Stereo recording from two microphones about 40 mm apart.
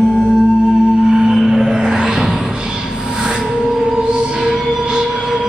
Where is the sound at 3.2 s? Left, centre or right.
Centre.